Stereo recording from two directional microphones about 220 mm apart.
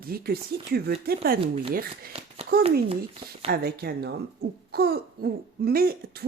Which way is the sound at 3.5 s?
45° right (ahead or behind).